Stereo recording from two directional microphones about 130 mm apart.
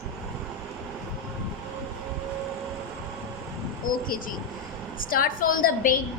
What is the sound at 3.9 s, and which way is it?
A woman's voice, 90° left.